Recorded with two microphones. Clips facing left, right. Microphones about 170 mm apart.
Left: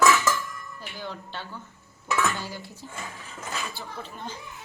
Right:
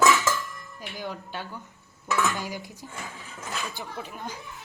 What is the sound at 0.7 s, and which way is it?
Speech, 10° right (ahead or behind).